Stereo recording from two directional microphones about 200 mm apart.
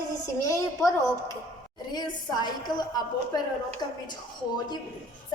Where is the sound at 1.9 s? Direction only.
20° left (ahead or behind).